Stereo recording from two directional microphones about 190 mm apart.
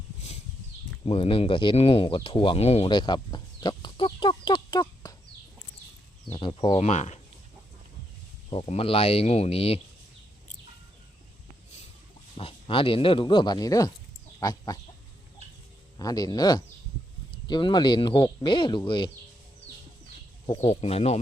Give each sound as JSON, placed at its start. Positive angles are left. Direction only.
{"t": 1.0, "sound": "speech", "side_deg": 30}
{"t": 6.3, "sound": "speech", "side_deg": 25}
{"t": 8.4, "sound": "speech", "side_deg": 30}
{"t": 12.4, "sound": "speech", "side_deg": 30}
{"t": 14.3, "sound": "chicken", "side_deg": 20}
{"t": 16.0, "sound": "speech", "side_deg": 20}
{"t": 20.7, "sound": "speech", "side_deg": 35}